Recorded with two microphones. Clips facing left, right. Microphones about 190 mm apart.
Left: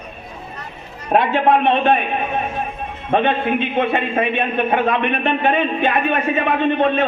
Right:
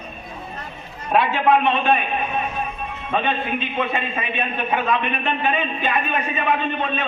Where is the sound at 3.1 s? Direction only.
55° left (ahead or behind).